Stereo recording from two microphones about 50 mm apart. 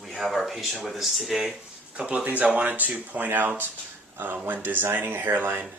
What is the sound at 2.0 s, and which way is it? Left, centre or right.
Speech, right.